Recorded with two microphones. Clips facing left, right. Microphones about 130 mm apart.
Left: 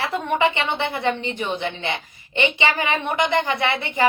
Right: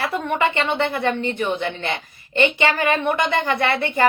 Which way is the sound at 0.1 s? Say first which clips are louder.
Even; 20° left (ahead or behind).